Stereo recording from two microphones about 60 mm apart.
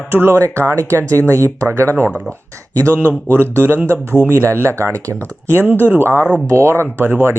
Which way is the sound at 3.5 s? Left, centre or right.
Right.